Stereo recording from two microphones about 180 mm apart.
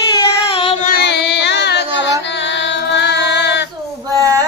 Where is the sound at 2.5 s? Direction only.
80° left.